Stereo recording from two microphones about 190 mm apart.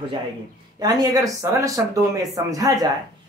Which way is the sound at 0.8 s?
20° right (ahead or behind).